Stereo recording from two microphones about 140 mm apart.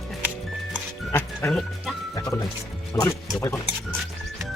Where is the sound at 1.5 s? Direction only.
Centre (ahead or behind).